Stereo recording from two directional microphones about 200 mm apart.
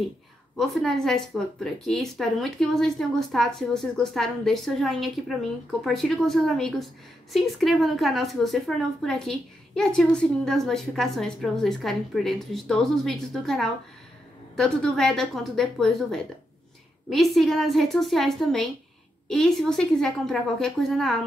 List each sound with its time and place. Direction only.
0.6 s a woman's voice: centre (ahead or behind)